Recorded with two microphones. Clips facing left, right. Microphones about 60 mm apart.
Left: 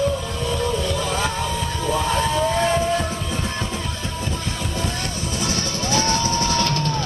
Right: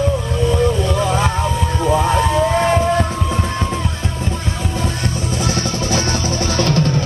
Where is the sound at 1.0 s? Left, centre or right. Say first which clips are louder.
Right 6 dB; right.